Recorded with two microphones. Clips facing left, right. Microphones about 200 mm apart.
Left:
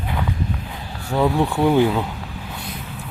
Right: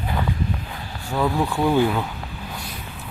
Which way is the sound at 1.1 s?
20° left (ahead or behind).